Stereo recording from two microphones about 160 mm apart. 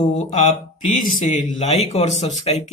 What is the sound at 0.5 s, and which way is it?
Speech, 55° left (ahead or behind).